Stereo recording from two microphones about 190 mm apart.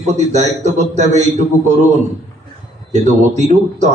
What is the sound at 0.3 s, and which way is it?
Speech, 40° right (ahead or behind).